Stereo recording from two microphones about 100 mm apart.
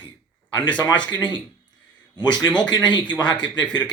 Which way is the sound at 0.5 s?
50° left (ahead or behind).